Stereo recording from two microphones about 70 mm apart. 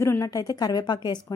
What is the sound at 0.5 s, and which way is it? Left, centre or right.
Speech, left.